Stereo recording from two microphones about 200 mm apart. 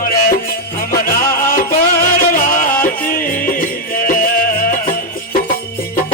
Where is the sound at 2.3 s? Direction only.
45° left (ahead or behind).